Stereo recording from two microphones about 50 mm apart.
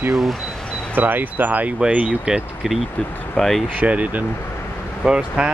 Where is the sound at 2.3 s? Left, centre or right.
Centre.